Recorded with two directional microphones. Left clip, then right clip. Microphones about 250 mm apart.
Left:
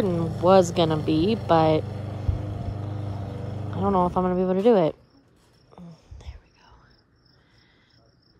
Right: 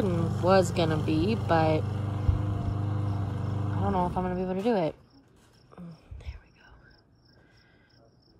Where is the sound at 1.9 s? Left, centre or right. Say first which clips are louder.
Even; right.